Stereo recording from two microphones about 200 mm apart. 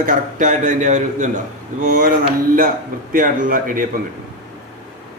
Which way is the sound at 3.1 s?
45° right (ahead or behind).